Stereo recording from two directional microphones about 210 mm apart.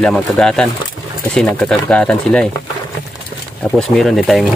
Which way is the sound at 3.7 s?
Centre (ahead or behind).